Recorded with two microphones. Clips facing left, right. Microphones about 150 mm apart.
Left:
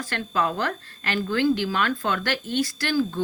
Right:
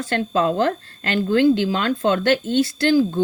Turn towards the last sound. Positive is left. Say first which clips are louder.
# right 7 dB
turn(degrees=-25)  # may be behind; listen again after turning